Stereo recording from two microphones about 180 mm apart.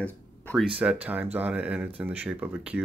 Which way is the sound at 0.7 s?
5° right (ahead or behind).